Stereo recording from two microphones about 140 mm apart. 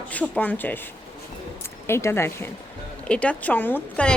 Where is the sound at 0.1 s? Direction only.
10° left (ahead or behind).